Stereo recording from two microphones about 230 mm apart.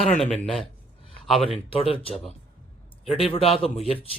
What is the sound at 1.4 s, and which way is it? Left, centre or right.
A man's voice, left.